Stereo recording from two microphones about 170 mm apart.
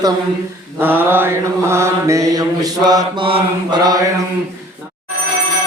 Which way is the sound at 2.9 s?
30° right (ahead or behind).